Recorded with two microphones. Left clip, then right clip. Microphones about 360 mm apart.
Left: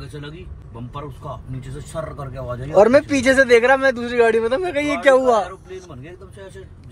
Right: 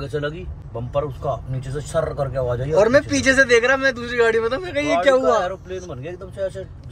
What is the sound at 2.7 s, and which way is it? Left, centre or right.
A man's voice, centre.